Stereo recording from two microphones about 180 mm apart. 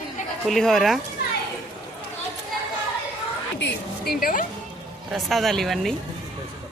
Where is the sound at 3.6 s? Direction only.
60° left (ahead or behind).